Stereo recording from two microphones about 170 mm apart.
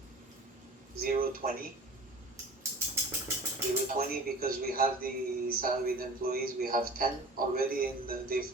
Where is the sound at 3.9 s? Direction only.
60° right (ahead or behind).